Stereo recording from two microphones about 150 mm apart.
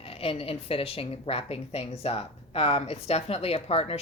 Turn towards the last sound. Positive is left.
turn(degrees=40)  # may be behind; listen again after turning